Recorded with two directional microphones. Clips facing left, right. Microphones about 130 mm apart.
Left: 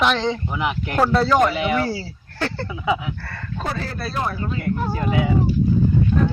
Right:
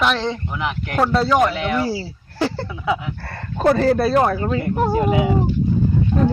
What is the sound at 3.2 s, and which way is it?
Speech, 40° right (ahead or behind).